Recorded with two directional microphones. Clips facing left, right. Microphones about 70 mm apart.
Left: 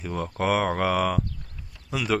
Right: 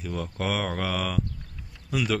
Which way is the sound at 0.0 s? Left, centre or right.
Left.